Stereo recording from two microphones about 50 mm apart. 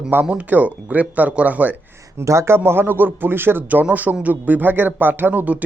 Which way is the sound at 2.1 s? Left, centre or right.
Right.